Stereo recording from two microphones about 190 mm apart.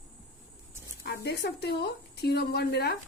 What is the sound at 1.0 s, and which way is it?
A woman's voice, 60° left (ahead or behind).